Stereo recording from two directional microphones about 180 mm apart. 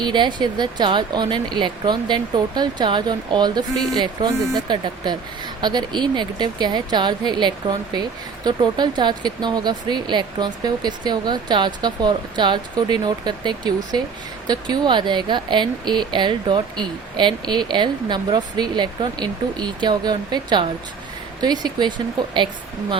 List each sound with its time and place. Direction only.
0.0 s a woman's voice: 25° right (ahead or behind)